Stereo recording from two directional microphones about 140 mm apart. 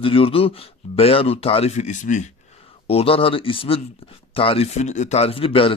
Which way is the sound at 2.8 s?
45° left (ahead or behind).